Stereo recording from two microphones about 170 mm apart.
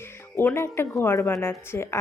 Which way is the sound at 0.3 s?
15° left (ahead or behind).